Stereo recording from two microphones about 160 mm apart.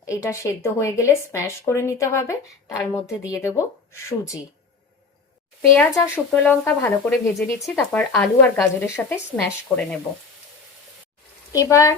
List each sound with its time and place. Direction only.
0.0 s speech: 20° left (ahead or behind)
6.0 s speech: 15° left (ahead or behind)
7.8 s speech: 5° left (ahead or behind)
11.5 s speech: 20° left (ahead or behind)